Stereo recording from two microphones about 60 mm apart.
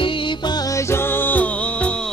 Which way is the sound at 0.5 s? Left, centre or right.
Left.